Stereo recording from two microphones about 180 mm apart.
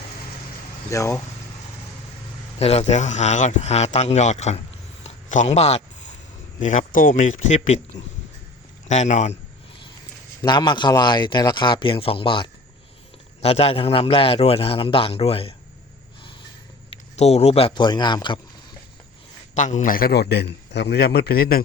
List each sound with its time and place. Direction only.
0.9 s speech: 15° left (ahead or behind)
2.6 s a man's voice: 35° left (ahead or behind)
5.0 s a sound: 40° left (ahead or behind)
6.6 s a man's voice: 45° left (ahead or behind)
8.9 s a man's voice: 40° left (ahead or behind)
10.4 s a man's voice: 25° left (ahead or behind)
16.9 s a man's voice: 35° left (ahead or behind)
19.5 s a man's voice: 45° left (ahead or behind)